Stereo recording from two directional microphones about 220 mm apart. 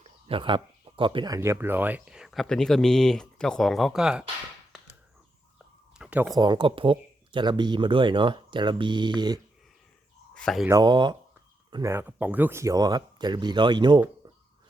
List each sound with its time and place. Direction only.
0.0 s speech: 25° right (ahead or behind); by 4.3 s 5° right (ahead or behind)
6.0 s a sound: 5° right (ahead or behind)
6.3 s speech: 20° right (ahead or behind)
10.3 s speech: centre (ahead or behind)
10.7 s speech: 20° right (ahead or behind)